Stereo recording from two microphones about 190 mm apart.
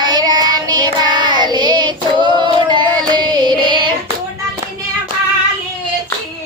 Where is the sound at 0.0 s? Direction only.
20° right (ahead or behind).